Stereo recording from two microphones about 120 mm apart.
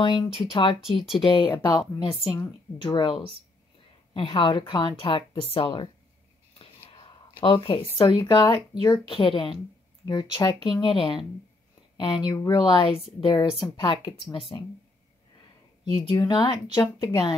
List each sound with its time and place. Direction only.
0.0 s a woman's voice: 45° left (ahead or behind)
7.3 s a woman's voice: 45° left (ahead or behind)
14.5 s a woman's voice: 30° left (ahead or behind)
15.8 s a woman's voice: 40° left (ahead or behind)